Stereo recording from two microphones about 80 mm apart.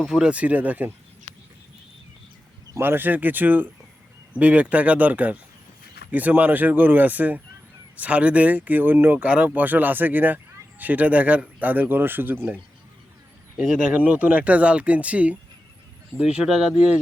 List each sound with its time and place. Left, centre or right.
0.0 s speech: centre
2.7 s speech: right
13.6 s speech: centre